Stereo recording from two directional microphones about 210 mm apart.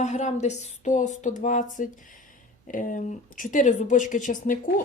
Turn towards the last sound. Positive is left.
turn(degrees=40)  # may be behind; listen again after turning